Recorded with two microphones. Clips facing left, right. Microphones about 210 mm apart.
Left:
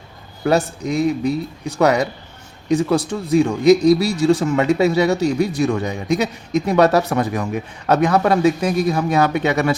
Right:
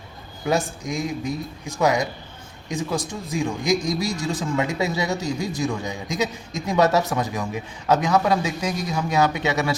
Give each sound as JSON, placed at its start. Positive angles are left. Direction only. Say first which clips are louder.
{"t": 0.4, "sound": "speech", "louder": "left 6 dB", "side_deg": 65}